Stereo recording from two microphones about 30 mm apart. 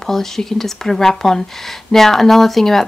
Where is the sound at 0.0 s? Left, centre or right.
Centre.